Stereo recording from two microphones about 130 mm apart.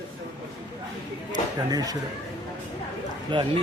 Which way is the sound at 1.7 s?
30° right (ahead or behind).